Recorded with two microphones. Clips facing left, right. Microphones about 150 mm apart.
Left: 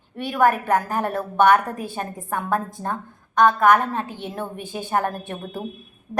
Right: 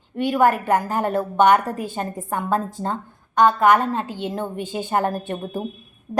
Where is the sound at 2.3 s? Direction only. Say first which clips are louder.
Right 1 dB; 15° right (ahead or behind).